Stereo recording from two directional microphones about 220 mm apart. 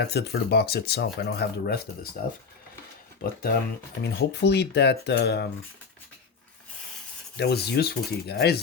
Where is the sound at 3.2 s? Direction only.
45° left (ahead or behind).